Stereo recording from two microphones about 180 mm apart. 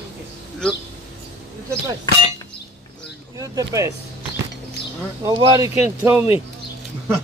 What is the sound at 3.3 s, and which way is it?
Speech, 15° right (ahead or behind).